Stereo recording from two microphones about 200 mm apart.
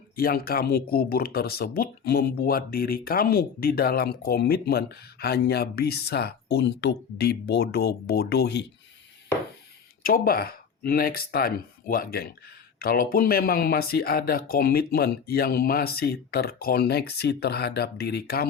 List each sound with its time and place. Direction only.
0.2 s speech: 50° left (ahead or behind)
10.0 s speech: 45° left (ahead or behind)